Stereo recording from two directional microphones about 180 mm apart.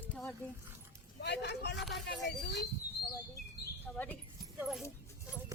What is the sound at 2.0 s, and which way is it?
Speech, 75° left (ahead or behind).